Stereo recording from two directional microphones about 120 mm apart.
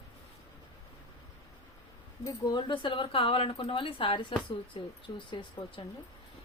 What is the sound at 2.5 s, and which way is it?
A woman's voice, 40° left (ahead or behind).